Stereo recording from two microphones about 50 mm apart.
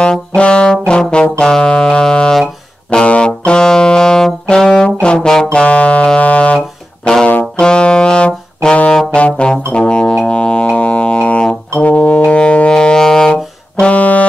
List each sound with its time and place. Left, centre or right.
0.0 s brass instrument: centre
1.4 s saxophone: centre
2.9 s brass instrument: centre
5.0 s music: centre
7.5 s brass instrument: centre
9.7 s music: centre
13.8 s saxophone: left